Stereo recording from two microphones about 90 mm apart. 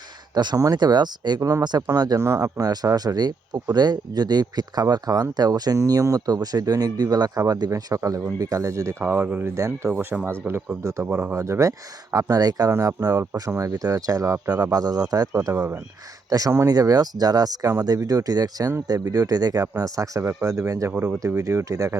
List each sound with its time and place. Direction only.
0.3 s speech: 50° right (ahead or behind)
1.4 s speech: 40° right (ahead or behind)
9.0 s speech: 20° right (ahead or behind)
9.6 s speech: 35° right (ahead or behind)
11.3 s speech: 35° right (ahead or behind)
12.1 s speech: 45° right (ahead or behind)
15.5 s speech: 15° right (ahead or behind)
16.3 s speech: 40° right (ahead or behind)
20.9 s speech: 20° right (ahead or behind)
21.2 s speech: 35° right (ahead or behind)